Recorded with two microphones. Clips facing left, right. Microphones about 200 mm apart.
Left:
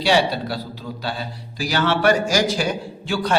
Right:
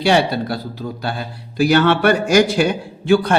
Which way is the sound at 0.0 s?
55° right (ahead or behind).